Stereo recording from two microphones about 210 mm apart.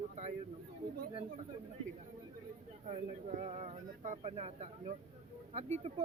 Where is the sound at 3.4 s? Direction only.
30° right (ahead or behind).